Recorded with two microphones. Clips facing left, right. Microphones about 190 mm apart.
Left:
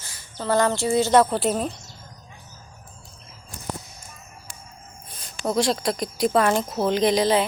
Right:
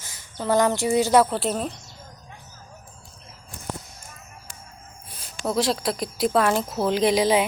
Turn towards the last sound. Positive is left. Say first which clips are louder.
# even
turn(degrees=-10)  # may be behind; listen again after turning